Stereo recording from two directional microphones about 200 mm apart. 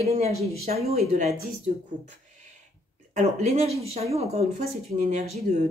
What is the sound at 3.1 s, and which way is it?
Speech, 35° right (ahead or behind).